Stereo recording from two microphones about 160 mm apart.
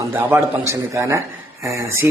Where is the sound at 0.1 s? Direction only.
15° right (ahead or behind).